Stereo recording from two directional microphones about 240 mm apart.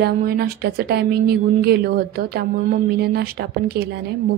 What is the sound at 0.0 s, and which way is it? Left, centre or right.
A woman's voice, right.